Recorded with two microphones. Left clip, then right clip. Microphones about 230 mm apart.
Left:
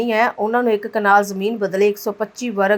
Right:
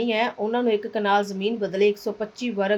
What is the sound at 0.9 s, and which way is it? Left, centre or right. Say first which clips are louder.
A woman's voice: left 7 dB; centre.